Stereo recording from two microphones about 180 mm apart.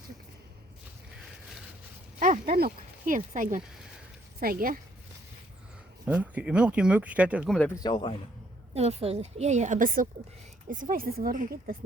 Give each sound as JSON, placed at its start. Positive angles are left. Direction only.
{"t": 2.1, "sound": "speech", "side_deg": -45}
{"t": 6.1, "sound": "speech", "side_deg": -10}
{"t": 7.8, "sound": "a man's voice", "side_deg": 25}
{"t": 8.7, "sound": "a woman's voice", "side_deg": -35}